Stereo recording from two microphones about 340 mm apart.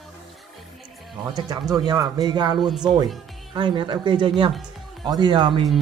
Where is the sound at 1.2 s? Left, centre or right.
Centre.